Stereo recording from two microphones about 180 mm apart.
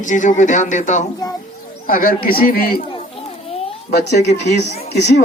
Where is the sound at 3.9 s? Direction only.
65° left (ahead or behind).